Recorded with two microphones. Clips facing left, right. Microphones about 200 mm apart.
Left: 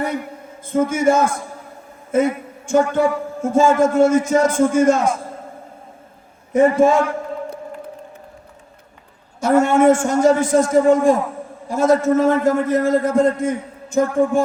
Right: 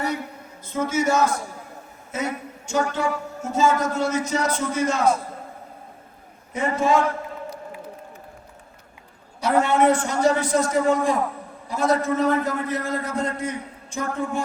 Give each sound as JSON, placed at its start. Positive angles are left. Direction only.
{"t": 0.6, "sound": "a man's voice", "side_deg": 50}
{"t": 6.5, "sound": "a woman's voice", "side_deg": 50}
{"t": 9.4, "sound": "a woman's voice", "side_deg": 45}